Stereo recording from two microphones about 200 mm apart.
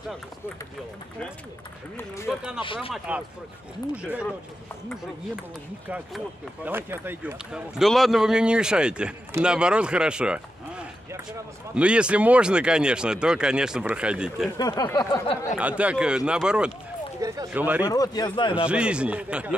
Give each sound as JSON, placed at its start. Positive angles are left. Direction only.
{"t": 2.3, "sound": "speech", "side_deg": 0}
{"t": 2.6, "sound": "speech", "side_deg": 25}
{"t": 3.9, "sound": "speech", "side_deg": -5}
{"t": 5.9, "sound": "speech", "side_deg": -5}
{"t": 14.6, "sound": "speech", "side_deg": 20}
{"t": 15.5, "sound": "speech", "side_deg": -5}
{"t": 17.8, "sound": "speech", "side_deg": 20}
{"t": 18.7, "sound": "speech", "side_deg": -5}